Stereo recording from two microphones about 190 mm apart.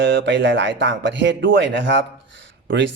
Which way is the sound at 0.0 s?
75° right (ahead or behind).